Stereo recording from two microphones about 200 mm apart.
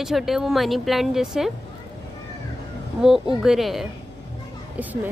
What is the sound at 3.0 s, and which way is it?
Speech, centre (ahead or behind).